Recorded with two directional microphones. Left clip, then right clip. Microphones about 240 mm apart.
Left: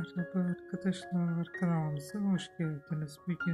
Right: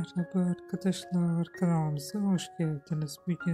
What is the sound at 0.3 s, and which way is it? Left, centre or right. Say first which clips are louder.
Speech: right 5 dB; centre.